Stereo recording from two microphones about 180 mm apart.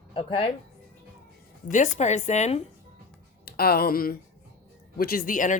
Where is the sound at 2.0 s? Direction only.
40° left (ahead or behind).